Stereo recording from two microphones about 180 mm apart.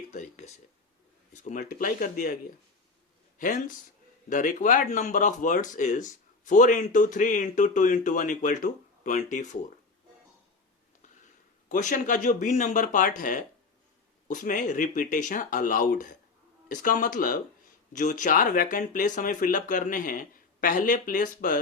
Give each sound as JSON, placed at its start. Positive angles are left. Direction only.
{"t": 0.1, "sound": "speech", "side_deg": 40}
{"t": 11.7, "sound": "speech", "side_deg": 45}